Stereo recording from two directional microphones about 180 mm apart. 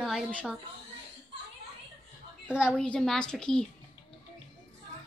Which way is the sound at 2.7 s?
5° left (ahead or behind).